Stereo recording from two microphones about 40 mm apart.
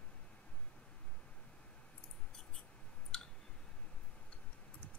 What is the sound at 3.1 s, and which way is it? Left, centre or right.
Clicking, centre.